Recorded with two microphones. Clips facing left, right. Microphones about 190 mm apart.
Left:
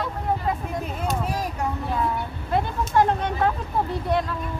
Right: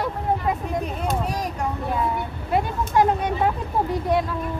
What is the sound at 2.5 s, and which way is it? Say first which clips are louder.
Speech: right 1 dB; 10° right (ahead or behind).